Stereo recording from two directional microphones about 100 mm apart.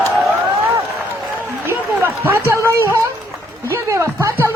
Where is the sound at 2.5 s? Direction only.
25° right (ahead or behind).